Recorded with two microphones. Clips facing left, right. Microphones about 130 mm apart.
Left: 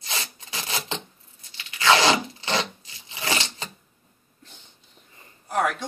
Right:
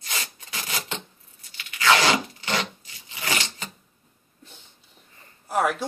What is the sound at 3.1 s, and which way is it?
Filing, 25° left (ahead or behind).